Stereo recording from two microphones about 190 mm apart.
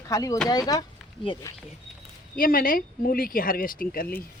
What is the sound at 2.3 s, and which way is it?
Speech, 50° left (ahead or behind).